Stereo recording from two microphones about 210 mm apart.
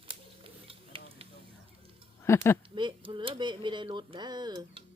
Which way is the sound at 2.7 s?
25° right (ahead or behind).